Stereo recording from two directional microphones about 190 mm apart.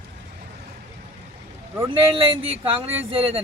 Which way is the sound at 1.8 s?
30° right (ahead or behind).